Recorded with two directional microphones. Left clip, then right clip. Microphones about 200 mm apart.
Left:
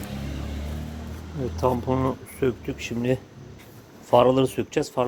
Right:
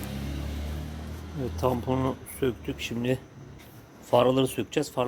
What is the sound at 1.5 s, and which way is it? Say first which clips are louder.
Speech: left 4 dB; centre (ahead or behind).